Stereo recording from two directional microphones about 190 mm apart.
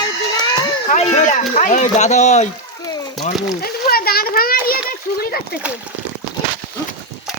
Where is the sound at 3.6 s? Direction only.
50° left (ahead or behind).